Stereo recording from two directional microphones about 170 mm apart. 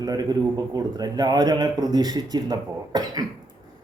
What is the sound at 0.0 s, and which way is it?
A man's voice, 20° right (ahead or behind).